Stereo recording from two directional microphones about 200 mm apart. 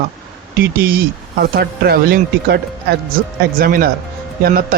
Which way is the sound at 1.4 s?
50° right (ahead or behind).